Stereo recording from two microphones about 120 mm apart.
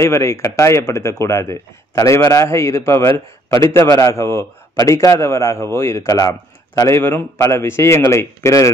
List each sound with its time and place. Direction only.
0.0 s a man's voice: 25° left (ahead or behind)